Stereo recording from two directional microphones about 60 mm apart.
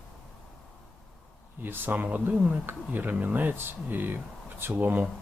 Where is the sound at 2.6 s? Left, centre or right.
Right.